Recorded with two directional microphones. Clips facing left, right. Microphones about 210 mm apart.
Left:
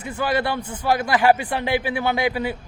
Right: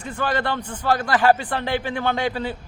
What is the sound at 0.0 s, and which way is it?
Speech, 10° left (ahead or behind).